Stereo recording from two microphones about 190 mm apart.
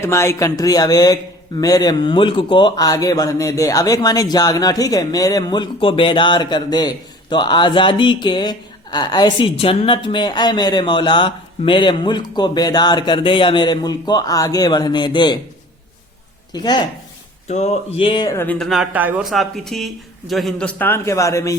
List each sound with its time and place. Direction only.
0.0 s speech: 15° left (ahead or behind)
16.5 s speech: 20° left (ahead or behind)
17.5 s speech: 35° left (ahead or behind); by 18.4 s 20° left (ahead or behind)
18.4 s speech: 5° left (ahead or behind)